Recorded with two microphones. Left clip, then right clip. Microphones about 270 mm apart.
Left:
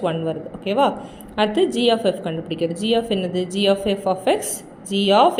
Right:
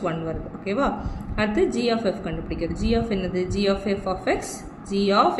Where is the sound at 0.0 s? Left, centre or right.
Centre.